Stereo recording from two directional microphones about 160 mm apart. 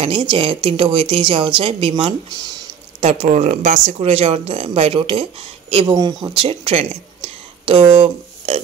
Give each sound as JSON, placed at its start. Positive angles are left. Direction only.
{"t": 0.0, "sound": "speech", "side_deg": -30}
{"t": 5.9, "sound": "speech", "side_deg": -25}